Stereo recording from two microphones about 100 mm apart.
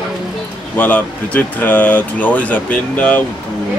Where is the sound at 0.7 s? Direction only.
15° left (ahead or behind).